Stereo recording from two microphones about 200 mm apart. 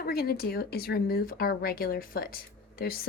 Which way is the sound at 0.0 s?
50° left (ahead or behind).